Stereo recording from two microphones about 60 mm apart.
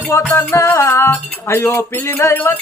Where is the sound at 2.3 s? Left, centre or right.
Left.